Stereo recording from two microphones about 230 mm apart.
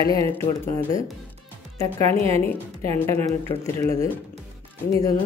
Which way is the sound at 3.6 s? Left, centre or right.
Centre.